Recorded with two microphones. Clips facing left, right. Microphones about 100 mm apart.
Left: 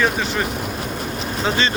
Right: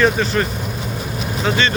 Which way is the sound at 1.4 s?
30° left (ahead or behind).